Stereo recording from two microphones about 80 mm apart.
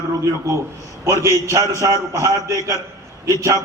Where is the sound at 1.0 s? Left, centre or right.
Right.